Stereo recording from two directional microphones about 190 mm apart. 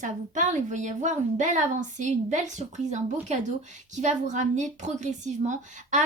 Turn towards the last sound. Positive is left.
turn(degrees=-40)  # may be behind; listen again after turning